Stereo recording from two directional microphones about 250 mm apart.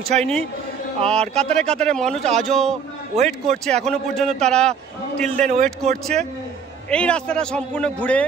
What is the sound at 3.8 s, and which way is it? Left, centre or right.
A man's voice, centre.